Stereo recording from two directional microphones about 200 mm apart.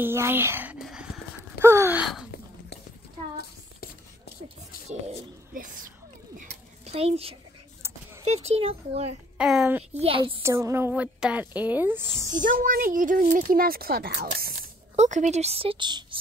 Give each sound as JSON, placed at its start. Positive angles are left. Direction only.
{"t": 0.0, "sound": "speech", "side_deg": -10}
{"t": 0.8, "sound": "clip-clop", "side_deg": -5}
{"t": 1.6, "sound": "speech", "side_deg": -15}
{"t": 5.5, "sound": "speech", "side_deg": -45}
{"t": 6.9, "sound": "a woman's voice", "side_deg": -30}
{"t": 7.8, "sound": "a sound", "side_deg": -15}
{"t": 8.3, "sound": "a woman's voice", "side_deg": -30}
{"t": 9.4, "sound": "a woman's voice", "side_deg": -5}
{"t": 9.9, "sound": "a woman's voice", "side_deg": -25}
{"t": 10.4, "sound": "speech", "side_deg": -15}
{"t": 12.6, "sound": "speech", "side_deg": -45}
{"t": 15.0, "sound": "a woman's voice", "side_deg": -35}